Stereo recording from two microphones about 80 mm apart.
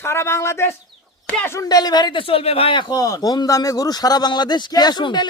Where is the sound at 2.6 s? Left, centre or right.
Left.